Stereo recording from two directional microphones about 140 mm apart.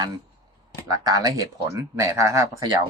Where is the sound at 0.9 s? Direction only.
25° right (ahead or behind).